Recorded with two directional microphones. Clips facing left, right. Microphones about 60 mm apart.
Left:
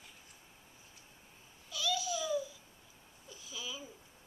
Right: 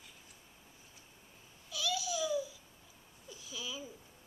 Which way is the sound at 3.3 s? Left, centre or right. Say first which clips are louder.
Right 1 dB; centre.